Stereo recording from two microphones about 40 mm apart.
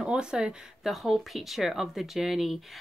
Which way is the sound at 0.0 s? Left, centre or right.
Right.